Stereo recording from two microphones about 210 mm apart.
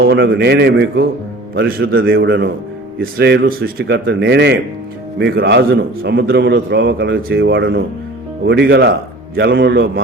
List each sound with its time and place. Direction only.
0.0 s a man's voice: 50° right (ahead or behind)